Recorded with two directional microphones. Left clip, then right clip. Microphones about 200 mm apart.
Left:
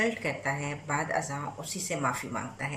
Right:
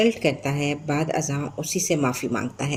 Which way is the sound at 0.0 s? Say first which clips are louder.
Right 8 dB; 55° right (ahead or behind).